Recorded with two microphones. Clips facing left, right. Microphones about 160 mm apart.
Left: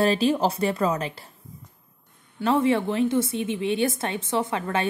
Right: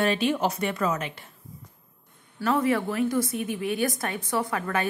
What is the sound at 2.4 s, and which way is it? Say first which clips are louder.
A woman's voice: left 3 dB; 25° left (ahead or behind).